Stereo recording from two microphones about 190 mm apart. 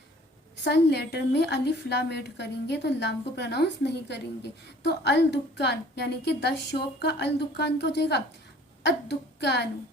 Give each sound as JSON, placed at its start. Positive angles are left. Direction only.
{"t": 0.5, "sound": "a woman's voice", "side_deg": 65}